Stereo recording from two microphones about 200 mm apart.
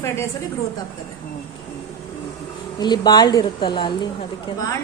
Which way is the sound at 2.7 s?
20° left (ahead or behind).